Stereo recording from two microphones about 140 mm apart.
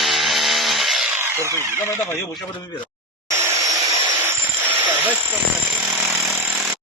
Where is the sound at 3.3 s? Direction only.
20° right (ahead or behind).